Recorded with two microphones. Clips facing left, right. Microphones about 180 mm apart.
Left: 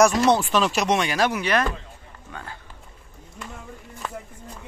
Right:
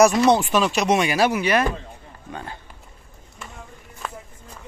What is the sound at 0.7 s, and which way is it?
Speech, centre (ahead or behind).